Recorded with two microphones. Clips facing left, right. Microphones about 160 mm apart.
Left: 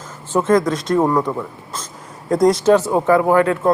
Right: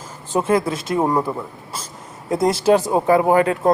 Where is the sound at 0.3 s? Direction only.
10° right (ahead or behind).